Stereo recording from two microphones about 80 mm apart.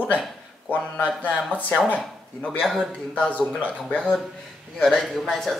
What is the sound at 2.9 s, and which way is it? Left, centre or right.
Speech, centre.